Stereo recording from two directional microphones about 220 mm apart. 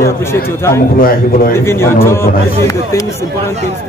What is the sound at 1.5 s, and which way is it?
Speech, 10° left (ahead or behind).